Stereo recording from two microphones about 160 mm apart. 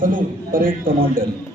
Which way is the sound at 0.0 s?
60° right (ahead or behind).